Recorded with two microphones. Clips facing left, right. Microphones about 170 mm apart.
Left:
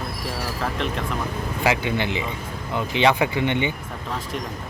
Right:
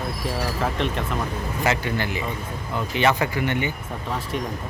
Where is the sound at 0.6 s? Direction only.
Centre (ahead or behind).